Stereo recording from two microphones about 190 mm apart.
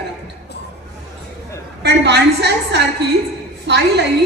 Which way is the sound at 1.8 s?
60° right (ahead or behind).